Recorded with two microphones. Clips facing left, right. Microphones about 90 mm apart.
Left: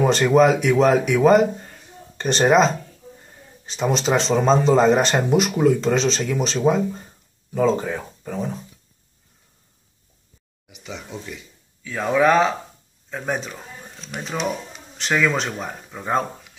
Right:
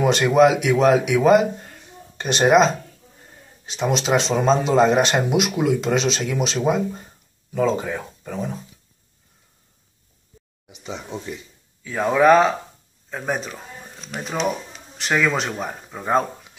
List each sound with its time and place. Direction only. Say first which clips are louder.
0.0 s speech: even; 5° right (ahead or behind)
10.7 s speech: right 3 dB; 30° right (ahead or behind)
11.8 s speech: right 2 dB; 10° right (ahead or behind)